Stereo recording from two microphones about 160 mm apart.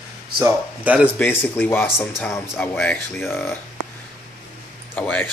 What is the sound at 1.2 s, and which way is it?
Speech, 15° left (ahead or behind).